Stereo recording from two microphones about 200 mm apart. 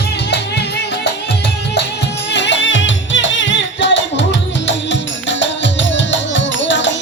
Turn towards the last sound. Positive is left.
turn(degrees=65)  # may be behind; listen again after turning